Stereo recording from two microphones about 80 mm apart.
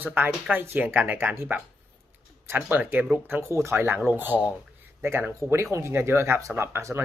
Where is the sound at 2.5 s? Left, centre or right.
Right.